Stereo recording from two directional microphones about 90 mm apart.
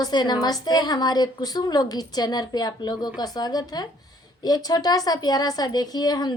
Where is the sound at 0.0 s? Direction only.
55° left (ahead or behind).